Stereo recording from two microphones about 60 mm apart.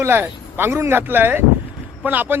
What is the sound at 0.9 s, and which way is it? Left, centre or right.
A man's voice, right.